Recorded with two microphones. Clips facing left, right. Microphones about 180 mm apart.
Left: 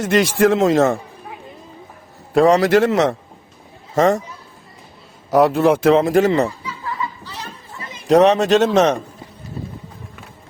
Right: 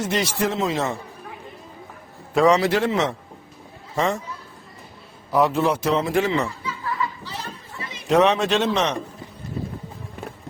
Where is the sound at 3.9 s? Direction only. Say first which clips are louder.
Left 8 dB; 40° left (ahead or behind).